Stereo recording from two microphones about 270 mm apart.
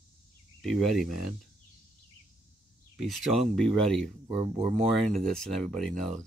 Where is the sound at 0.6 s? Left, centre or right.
Centre.